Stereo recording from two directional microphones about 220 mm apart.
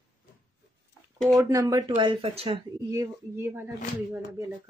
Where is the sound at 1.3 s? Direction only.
15° right (ahead or behind).